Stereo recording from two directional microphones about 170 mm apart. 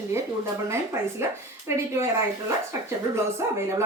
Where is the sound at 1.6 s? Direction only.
15° right (ahead or behind).